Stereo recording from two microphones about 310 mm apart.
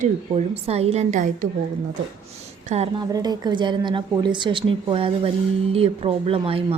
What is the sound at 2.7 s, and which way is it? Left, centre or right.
A woman's voice, centre.